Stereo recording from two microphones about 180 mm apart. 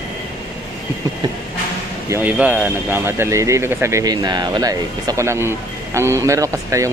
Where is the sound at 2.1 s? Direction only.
10° right (ahead or behind).